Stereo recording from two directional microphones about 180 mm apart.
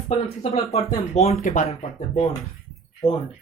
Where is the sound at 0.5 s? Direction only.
35° left (ahead or behind).